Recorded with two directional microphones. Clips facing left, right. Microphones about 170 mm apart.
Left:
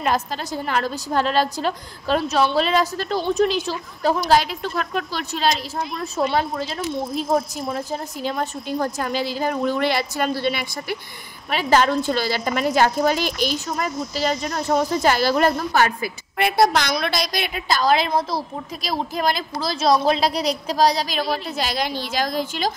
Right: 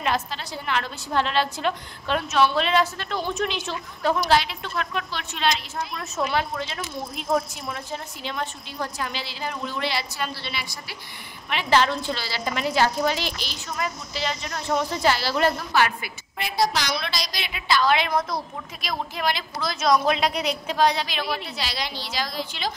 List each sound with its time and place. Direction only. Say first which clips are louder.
0.0 s a woman's voice: left 4 dB; 45° left (ahead or behind)
16.3 s a woman's voice: left 6 dB; 60° left (ahead or behind)